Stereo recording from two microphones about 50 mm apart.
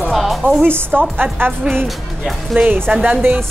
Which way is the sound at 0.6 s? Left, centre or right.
Right.